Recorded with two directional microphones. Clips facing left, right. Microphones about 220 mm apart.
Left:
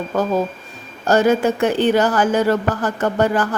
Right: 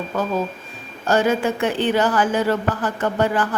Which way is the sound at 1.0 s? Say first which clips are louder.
Left 4 dB; 40° left (ahead or behind).